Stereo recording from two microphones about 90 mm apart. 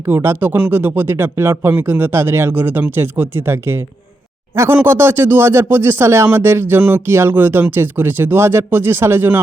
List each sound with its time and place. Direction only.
0.0 s speech: 25° right (ahead or behind)